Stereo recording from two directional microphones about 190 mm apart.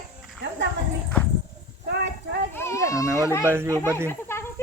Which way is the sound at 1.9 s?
60° right (ahead or behind).